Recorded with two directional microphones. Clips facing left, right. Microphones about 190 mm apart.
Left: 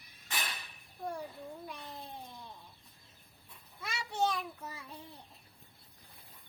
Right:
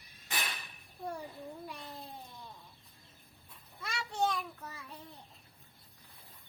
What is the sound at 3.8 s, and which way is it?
Child singing, centre (ahead or behind).